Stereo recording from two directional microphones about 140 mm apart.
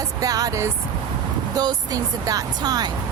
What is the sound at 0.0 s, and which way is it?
Speech, 25° right (ahead or behind).